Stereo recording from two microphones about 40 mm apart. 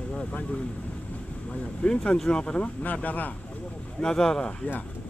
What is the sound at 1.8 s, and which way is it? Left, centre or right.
Speech, left.